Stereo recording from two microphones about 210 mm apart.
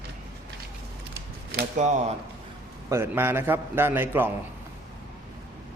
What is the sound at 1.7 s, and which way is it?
Speech, 35° right (ahead or behind).